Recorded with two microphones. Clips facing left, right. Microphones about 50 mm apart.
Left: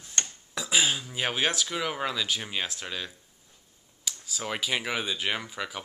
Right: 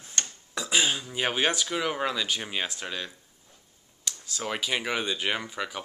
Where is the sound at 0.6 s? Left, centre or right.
Centre.